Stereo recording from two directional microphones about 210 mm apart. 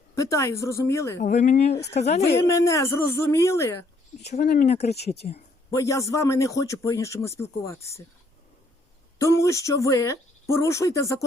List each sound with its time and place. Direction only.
0.2 s a man's voice: 15° left (ahead or behind)
1.2 s speech: 35° left (ahead or behind); by 2.0 s 50° left (ahead or behind)
2.0 s speech: 30° left (ahead or behind)
2.5 s a man's voice: 15° left (ahead or behind)
4.3 s speech: 35° left (ahead or behind)
4.9 s speech: 50° left (ahead or behind)
5.7 s a man's voice: 15° left (ahead or behind)
9.1 s a man's voice: 15° left (ahead or behind)